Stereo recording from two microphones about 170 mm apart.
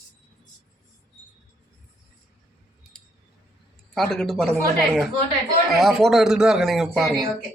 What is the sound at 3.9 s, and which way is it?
Speech, 5° left (ahead or behind).